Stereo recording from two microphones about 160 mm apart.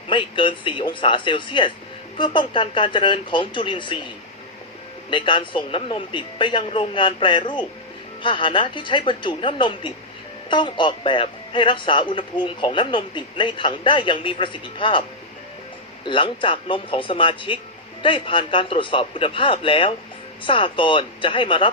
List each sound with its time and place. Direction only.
0.1 s a man's voice: 30° left (ahead or behind)
5.1 s a man's voice: 30° left (ahead or behind)
16.0 s a man's voice: 30° left (ahead or behind)